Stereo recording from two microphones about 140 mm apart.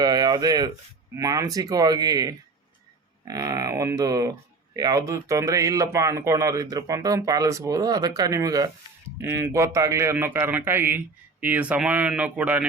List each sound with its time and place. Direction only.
0.0 s a man's voice: 30° right (ahead or behind); by 12.6 s 10° right (ahead or behind)